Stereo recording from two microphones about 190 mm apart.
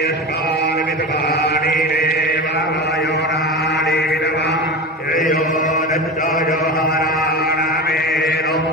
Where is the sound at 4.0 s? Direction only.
60° left (ahead or behind).